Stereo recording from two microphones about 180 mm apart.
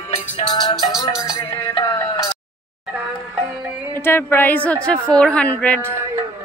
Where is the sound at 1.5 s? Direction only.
25° left (ahead or behind).